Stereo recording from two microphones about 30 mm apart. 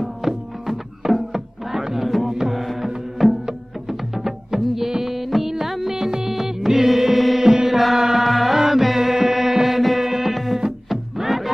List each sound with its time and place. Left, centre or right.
0.2 s music: centre
4.1 s music: centre
5.9 s music: centre
8.3 s music: centre